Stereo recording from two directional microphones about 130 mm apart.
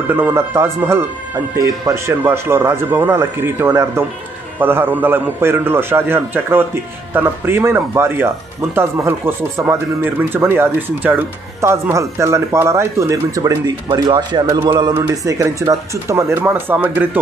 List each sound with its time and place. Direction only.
0.1 s a man's voice: 15° right (ahead or behind); by 15.0 s 35° right (ahead or behind)
15.0 s a man's voice: 25° right (ahead or behind)